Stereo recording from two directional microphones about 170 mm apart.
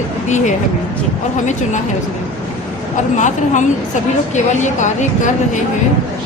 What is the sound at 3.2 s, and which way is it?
Speech, 45° left (ahead or behind).